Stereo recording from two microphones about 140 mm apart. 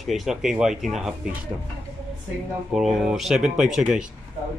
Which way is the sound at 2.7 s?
Centre (ahead or behind).